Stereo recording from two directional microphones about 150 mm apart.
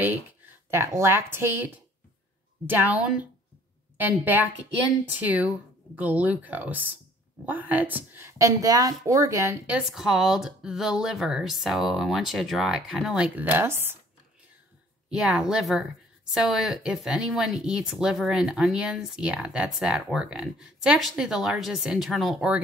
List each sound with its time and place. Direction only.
0.7 s a woman's voice: 20° right (ahead or behind)
9.7 s speech: 5° right (ahead or behind)
15.0 s speech: 5° right (ahead or behind)